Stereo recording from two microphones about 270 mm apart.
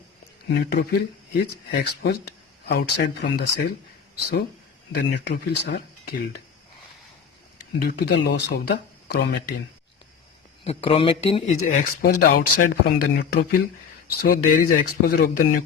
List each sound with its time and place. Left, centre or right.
0.5 s speech: left
7.8 s speech: left
10.6 s speech: left